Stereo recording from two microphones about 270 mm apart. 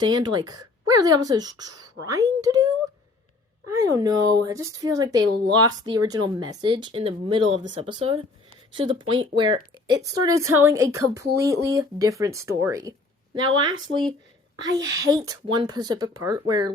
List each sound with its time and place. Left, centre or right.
0.0 s speech: centre
3.7 s speech: centre
15.0 s speech: centre